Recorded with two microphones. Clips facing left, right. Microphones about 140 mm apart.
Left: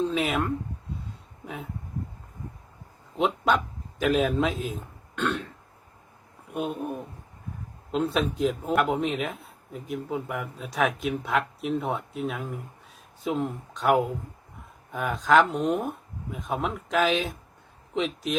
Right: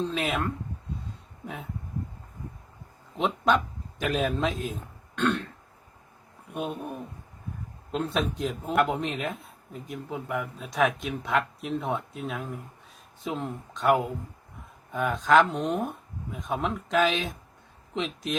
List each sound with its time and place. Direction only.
0.1 s speech: centre (ahead or behind)
3.2 s a man's voice: 5° left (ahead or behind)
6.5 s speech: centre (ahead or behind)
7.9 s speech: centre (ahead or behind)